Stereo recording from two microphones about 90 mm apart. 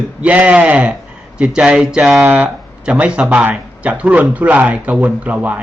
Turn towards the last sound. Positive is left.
turn(degrees=-15)  # may be behind; listen again after turning